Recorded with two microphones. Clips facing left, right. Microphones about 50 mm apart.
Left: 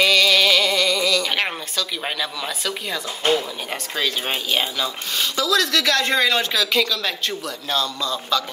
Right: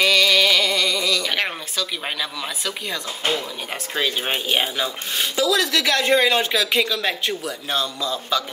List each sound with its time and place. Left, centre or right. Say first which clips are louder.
0.0 s music: left 1 dB; centre
1.8 s speech: left 1 dB; centre